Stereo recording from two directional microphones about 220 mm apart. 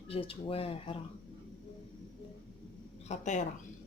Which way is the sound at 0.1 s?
25° left (ahead or behind).